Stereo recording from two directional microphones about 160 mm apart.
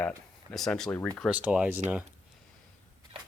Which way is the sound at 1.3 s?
10° right (ahead or behind).